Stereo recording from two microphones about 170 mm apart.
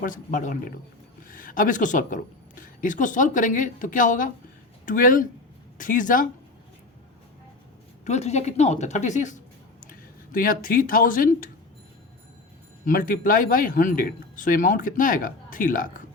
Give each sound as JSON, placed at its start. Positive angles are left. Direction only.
{"t": 0.0, "sound": "speech", "side_deg": 50}
{"t": 8.0, "sound": "speech", "side_deg": 40}
{"t": 12.8, "sound": "speech", "side_deg": 55}